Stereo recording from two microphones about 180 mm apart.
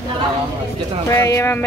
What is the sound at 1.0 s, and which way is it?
Speech, 15° left (ahead or behind).